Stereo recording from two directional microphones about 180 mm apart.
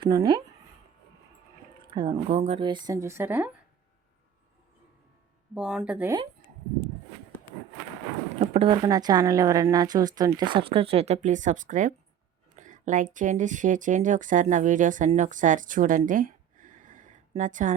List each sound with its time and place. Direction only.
0.0 s speech: 20° right (ahead or behind)
1.8 s speech: 25° right (ahead or behind); by 3.5 s 10° right (ahead or behind)
5.5 s speech: 5° right (ahead or behind)
8.4 s speech: 30° right (ahead or behind)